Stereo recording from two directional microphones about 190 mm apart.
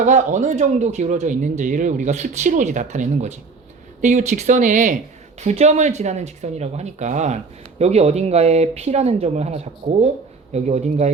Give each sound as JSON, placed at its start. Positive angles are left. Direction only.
{"t": 0.0, "sound": "speech", "side_deg": -40}